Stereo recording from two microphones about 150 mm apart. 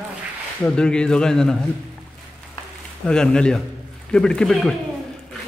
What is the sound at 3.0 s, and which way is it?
A man's voice, 5° left (ahead or behind).